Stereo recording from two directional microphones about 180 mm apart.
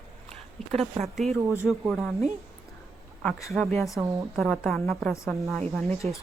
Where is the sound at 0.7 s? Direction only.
35° right (ahead or behind).